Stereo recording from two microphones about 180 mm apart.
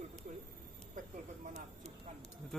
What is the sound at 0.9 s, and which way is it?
Speech, 45° right (ahead or behind).